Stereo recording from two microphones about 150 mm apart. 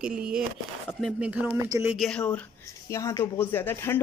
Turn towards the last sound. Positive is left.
turn(degrees=15)  # may be behind; listen again after turning